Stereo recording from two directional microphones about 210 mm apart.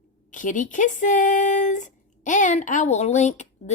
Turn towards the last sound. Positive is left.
turn(degrees=35)  # may be behind; listen again after turning